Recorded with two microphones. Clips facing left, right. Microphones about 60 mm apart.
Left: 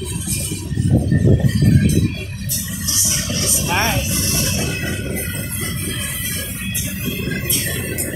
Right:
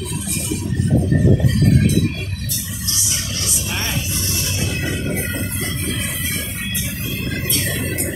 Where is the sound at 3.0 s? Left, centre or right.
Left.